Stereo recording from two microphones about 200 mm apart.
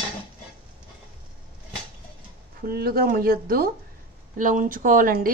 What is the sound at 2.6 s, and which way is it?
A woman's voice, 50° right (ahead or behind).